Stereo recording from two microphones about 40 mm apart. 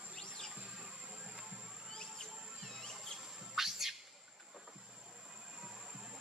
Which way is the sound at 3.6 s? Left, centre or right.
Centre.